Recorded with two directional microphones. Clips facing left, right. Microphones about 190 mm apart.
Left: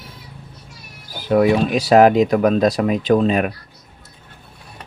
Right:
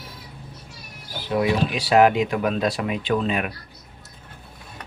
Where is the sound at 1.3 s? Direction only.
50° left (ahead or behind).